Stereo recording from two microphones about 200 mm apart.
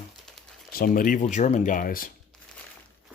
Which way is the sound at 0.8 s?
45° left (ahead or behind).